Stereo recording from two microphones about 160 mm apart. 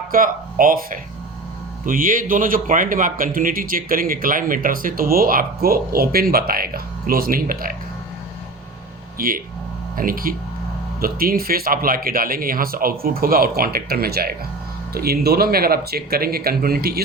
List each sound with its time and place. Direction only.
0.1 s speech: 60° right (ahead or behind)
9.1 s speech: 65° right (ahead or behind)